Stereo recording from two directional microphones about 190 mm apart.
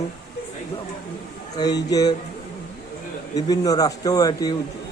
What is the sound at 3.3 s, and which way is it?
Speech, 20° left (ahead or behind).